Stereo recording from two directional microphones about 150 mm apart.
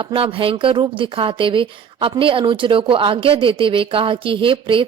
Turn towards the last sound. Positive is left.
turn(degrees=-35)  # may be behind; listen again after turning